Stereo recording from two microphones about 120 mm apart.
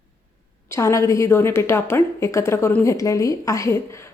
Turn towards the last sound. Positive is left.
turn(degrees=25)  # may be behind; listen again after turning